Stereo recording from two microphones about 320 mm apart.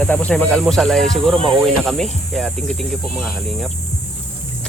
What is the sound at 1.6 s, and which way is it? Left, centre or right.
Speech, centre.